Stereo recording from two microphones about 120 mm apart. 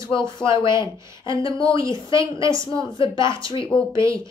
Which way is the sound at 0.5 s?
25° right (ahead or behind).